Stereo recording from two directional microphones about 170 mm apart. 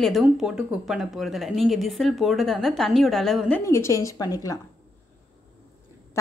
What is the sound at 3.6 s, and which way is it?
A woman's voice, 15° left (ahead or behind).